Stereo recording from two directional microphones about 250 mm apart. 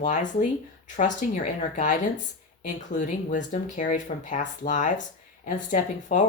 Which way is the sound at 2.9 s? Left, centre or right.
Left.